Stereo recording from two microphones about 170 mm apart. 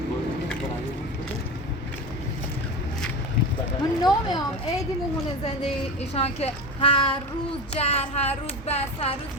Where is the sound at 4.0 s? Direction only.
25° left (ahead or behind).